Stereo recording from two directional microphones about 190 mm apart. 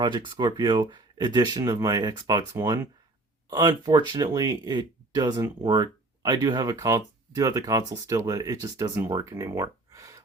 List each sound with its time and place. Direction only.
0.0 s speech: 25° right (ahead or behind)